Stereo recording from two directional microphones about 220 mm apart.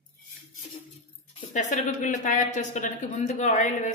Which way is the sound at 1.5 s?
35° left (ahead or behind).